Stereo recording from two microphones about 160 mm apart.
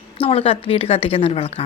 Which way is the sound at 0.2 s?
35° left (ahead or behind).